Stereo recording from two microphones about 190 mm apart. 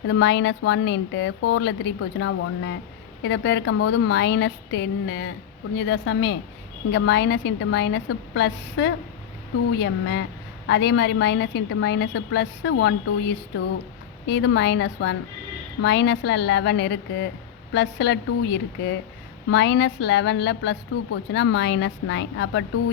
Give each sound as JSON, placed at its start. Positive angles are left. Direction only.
{"t": 0.1, "sound": "speech", "side_deg": 70}
{"t": 3.2, "sound": "a woman's voice", "side_deg": 65}